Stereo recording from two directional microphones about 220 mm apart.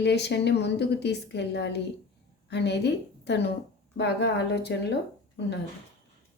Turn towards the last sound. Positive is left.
turn(degrees=55)  # may be behind; listen again after turning